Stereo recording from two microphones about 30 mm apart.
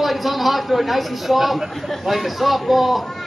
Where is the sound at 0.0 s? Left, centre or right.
Centre.